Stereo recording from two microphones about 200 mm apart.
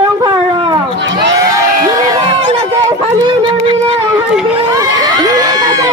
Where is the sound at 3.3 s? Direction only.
25° right (ahead or behind).